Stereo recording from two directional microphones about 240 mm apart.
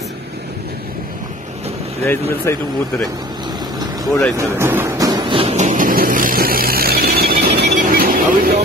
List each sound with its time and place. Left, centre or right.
2.0 s speech: centre
4.4 s music: centre; by 8.5 s right